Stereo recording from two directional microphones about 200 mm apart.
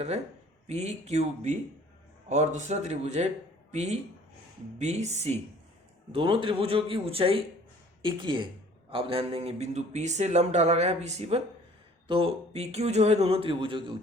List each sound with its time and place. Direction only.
0.7 s speech: 35° right (ahead or behind)